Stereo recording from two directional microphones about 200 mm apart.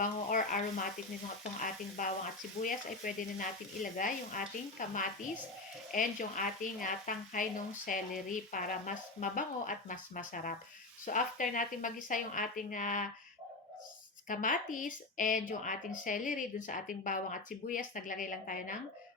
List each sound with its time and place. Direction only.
0.0 s speech: 40° left (ahead or behind)
14.3 s speech: 40° left (ahead or behind)